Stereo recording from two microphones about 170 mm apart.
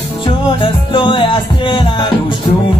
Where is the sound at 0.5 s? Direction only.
30° left (ahead or behind).